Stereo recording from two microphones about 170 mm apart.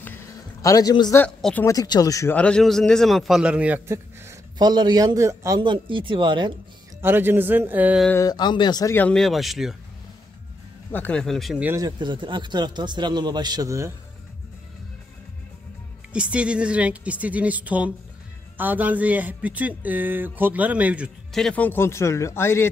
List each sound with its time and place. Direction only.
0.0 s a sound: 15° left (ahead or behind)
1.1 s speech: 10° left (ahead or behind)
1.7 s speech: 20° left (ahead or behind)
2.3 s a man's voice: 5° left (ahead or behind); by 6.5 s 30° right (ahead or behind)
7.0 s a man's voice: 15° right (ahead or behind)
8.2 s speech: 25° left (ahead or behind)
8.9 s speech: 5° left (ahead or behind)
10.9 s speech: 10° left (ahead or behind)
11.6 s a man's voice: 15° right (ahead or behind)
12.0 s a man's voice: 30° right (ahead or behind)
16.1 s a man's voice: 5° right (ahead or behind); by 22.7 s 15° left (ahead or behind)